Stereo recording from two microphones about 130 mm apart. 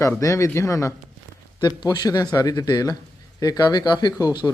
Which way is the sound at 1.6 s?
35° left (ahead or behind).